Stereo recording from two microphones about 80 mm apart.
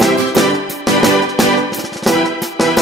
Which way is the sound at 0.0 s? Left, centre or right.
Centre.